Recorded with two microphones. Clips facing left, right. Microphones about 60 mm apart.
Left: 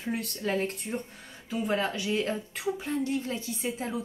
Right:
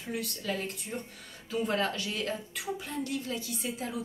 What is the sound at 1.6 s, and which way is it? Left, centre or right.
A woman's voice, centre.